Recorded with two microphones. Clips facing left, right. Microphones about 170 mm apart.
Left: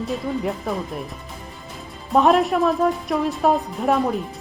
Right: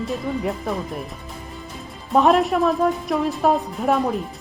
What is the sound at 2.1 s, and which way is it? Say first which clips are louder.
A woman's voice: even; centre (ahead or behind).